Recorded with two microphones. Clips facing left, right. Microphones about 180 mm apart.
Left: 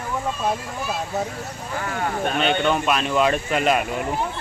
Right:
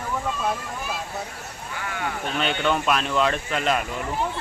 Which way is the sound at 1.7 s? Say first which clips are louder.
Left 4 dB; 40° left (ahead or behind).